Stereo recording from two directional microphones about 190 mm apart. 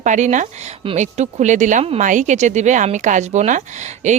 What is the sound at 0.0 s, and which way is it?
Speech, 40° right (ahead or behind).